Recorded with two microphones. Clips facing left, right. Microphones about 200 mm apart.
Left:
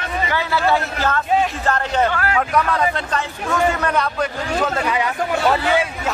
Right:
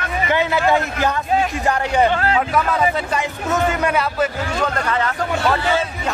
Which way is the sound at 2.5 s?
5° right (ahead or behind).